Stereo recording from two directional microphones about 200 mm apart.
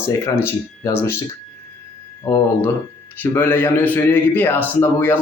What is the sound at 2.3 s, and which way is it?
A man's voice, 15° left (ahead or behind).